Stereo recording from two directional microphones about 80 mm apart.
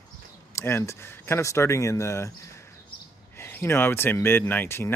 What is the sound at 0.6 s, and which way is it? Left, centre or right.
Speech, left.